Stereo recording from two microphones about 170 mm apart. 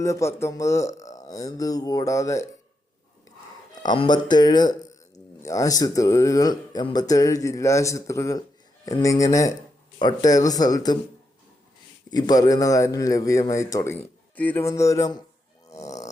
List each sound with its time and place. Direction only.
0.0 s speech: 15° left (ahead or behind)
3.8 s speech: 25° left (ahead or behind)
12.1 s speech: 25° left (ahead or behind)